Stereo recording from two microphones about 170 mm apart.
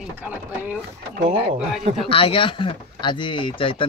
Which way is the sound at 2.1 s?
30° left (ahead or behind).